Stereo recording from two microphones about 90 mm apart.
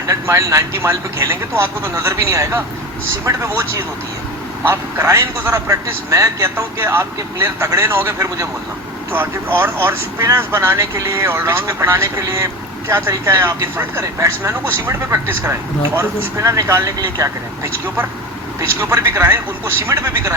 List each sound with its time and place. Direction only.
0.1 s a man's voice: 35° right (ahead or behind)